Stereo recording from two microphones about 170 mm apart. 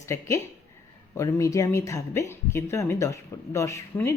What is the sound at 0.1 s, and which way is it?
Speech, 15° left (ahead or behind).